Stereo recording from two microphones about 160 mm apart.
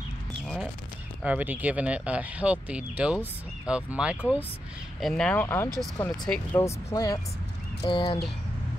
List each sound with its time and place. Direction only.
1.2 s speech: 10° right (ahead or behind)
5.0 s speech: 5° left (ahead or behind)
6.6 s speech: 20° left (ahead or behind)